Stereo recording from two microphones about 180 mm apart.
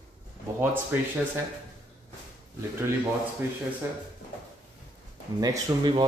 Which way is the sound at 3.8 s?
15° right (ahead or behind).